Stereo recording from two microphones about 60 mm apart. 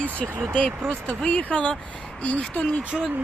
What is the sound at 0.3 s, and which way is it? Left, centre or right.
Speech, right.